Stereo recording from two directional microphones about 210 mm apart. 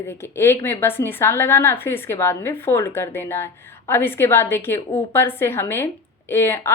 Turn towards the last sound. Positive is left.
turn(degrees=10)  # may be behind; listen again after turning